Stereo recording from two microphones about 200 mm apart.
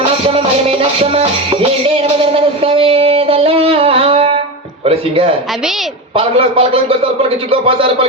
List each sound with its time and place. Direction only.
0.3 s music: 30° right (ahead or behind)
2.2 s a sound: 30° right (ahead or behind)
4.9 s a man's voice: 30° right (ahead or behind)